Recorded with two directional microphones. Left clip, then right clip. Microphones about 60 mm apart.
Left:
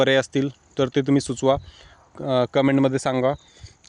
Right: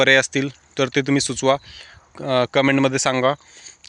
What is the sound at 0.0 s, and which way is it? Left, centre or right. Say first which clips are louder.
Speech: right 4 dB; left.